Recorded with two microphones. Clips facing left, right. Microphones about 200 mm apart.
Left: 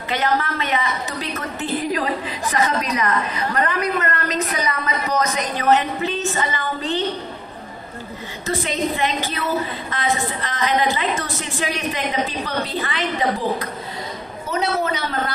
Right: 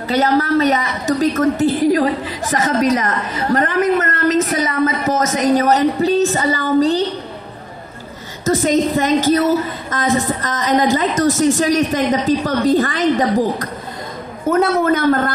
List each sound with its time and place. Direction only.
0.1 s a woman's voice: 40° right (ahead or behind)
8.5 s a woman's voice: 45° right (ahead or behind)